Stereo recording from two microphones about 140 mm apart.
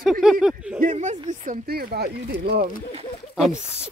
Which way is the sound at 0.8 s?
60° right (ahead or behind).